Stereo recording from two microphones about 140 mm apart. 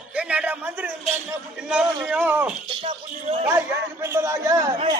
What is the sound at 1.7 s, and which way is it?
A man's voice, 10° right (ahead or behind).